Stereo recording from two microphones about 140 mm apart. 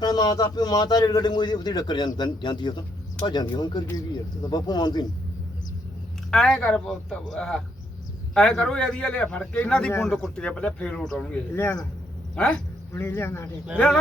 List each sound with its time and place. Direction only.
0.0 s a man's voice: 30° left (ahead or behind)
6.3 s a man's voice: 5° left (ahead or behind)
12.9 s speech: 15° left (ahead or behind)
13.7 s a man's voice: 5° left (ahead or behind)